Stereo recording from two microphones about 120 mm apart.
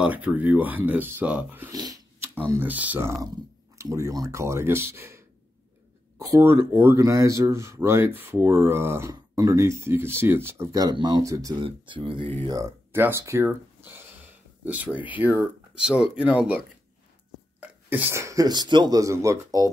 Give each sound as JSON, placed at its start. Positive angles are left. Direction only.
{"t": 0.0, "sound": "speech", "side_deg": -15}
{"t": 1.7, "sound": "a sound", "side_deg": -30}
{"t": 2.6, "sound": "speech", "side_deg": -15}
{"t": 3.7, "sound": "speech", "side_deg": -25}
{"t": 10.7, "sound": "speech", "side_deg": -35}
{"t": 11.6, "sound": "speech", "side_deg": -45}
{"t": 12.4, "sound": "speech", "side_deg": -25}